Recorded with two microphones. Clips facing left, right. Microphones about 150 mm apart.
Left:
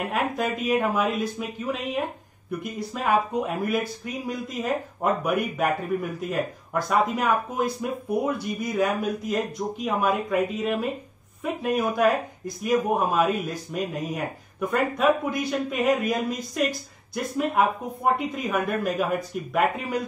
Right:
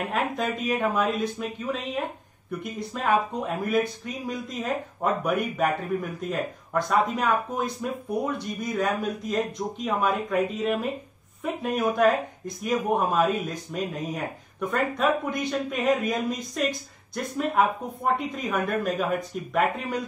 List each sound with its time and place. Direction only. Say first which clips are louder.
0.1 s speech: left 1 dB; 5° left (ahead or behind)